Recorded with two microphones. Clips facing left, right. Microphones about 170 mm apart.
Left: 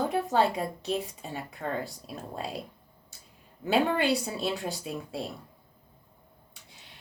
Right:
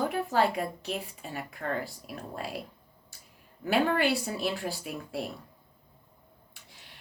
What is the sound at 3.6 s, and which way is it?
A woman's voice, 25° left (ahead or behind).